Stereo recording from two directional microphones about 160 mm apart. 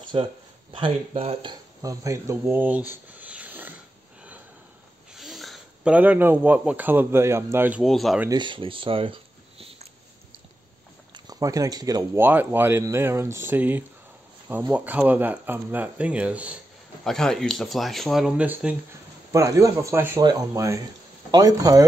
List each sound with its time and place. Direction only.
0.1 s speech: 35° right (ahead or behind)
2.4 s speech: 10° right (ahead or behind)
2.9 s a sound: 10° right (ahead or behind)
5.1 s speech: centre (ahead or behind)
7.8 s speech: centre (ahead or behind)
8.3 s speech: 30° right (ahead or behind)
11.2 s speech: 20° right (ahead or behind)
12.3 s speech: 10° right (ahead or behind)
17.0 s speech: 5° left (ahead or behind)
19.3 s speech: 20° right (ahead or behind)